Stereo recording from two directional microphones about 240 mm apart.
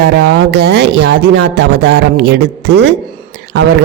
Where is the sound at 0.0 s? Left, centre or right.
Right.